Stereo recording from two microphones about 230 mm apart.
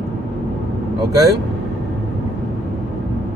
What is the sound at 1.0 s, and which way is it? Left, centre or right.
Speech, centre.